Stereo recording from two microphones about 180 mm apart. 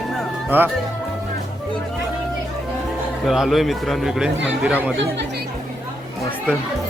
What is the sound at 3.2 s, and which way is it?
A man's voice, centre (ahead or behind).